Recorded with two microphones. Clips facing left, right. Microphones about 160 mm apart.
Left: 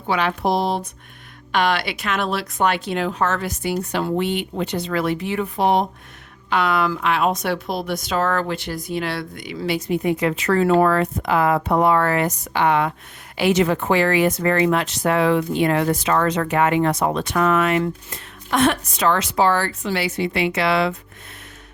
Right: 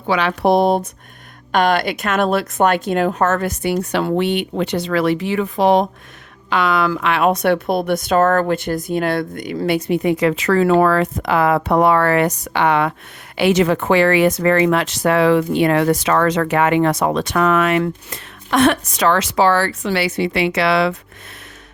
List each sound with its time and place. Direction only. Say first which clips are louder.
0.1 s a woman's voice: right 5 dB; 90° right